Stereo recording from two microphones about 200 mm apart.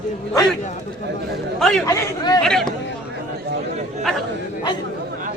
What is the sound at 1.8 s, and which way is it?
Speech, 20° left (ahead or behind).